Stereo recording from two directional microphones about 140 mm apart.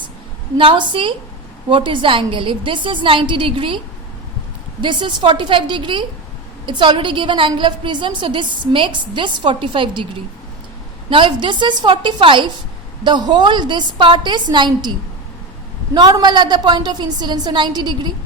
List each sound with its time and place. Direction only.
0.5 s a woman's voice: 35° right (ahead or behind)
4.8 s a woman's voice: 35° right (ahead or behind)
11.1 s a woman's voice: 35° right (ahead or behind)
16.0 s a woman's voice: 30° right (ahead or behind)